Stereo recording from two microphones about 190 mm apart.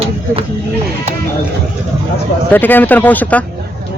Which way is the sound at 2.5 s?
10° left (ahead or behind).